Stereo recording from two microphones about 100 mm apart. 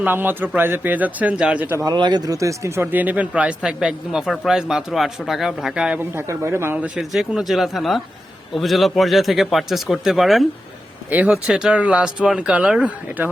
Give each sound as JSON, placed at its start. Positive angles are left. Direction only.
{"t": 0.0, "sound": "speech", "side_deg": -20}
{"t": 1.7, "sound": "speech", "side_deg": -35}
{"t": 6.0, "sound": "a man's voice", "side_deg": -25}
{"t": 6.8, "sound": "speech", "side_deg": -5}
{"t": 11.1, "sound": "speech", "side_deg": -15}
{"t": 11.4, "sound": "speech", "side_deg": -5}